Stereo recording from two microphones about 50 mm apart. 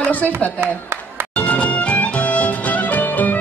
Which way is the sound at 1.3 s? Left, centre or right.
Left.